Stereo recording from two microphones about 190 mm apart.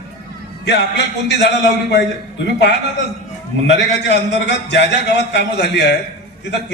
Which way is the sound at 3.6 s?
65° left (ahead or behind).